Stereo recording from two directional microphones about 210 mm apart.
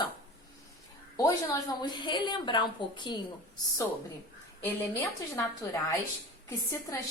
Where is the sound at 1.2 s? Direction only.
15° left (ahead or behind).